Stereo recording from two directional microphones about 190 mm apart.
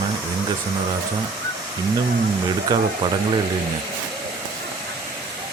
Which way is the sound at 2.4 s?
25° right (ahead or behind).